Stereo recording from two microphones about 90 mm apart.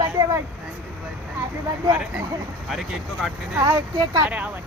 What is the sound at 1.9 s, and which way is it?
Speech, 10° right (ahead or behind).